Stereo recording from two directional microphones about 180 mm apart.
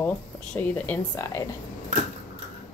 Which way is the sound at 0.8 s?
10° left (ahead or behind).